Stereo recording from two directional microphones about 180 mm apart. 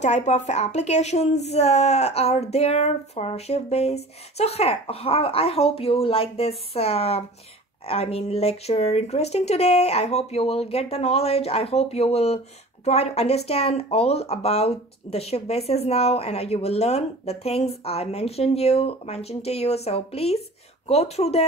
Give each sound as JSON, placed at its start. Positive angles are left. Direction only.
{"t": 0.0, "sound": "speech", "side_deg": 40}